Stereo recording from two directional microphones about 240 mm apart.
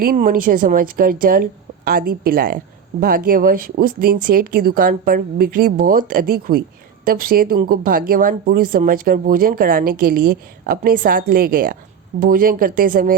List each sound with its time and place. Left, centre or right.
0.0 s speech: right